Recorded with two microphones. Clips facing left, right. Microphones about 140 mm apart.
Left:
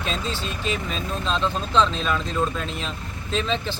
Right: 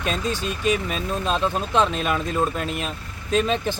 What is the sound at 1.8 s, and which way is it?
Speech, 55° right (ahead or behind).